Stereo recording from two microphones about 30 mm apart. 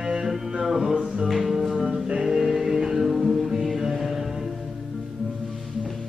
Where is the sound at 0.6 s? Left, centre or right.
Centre.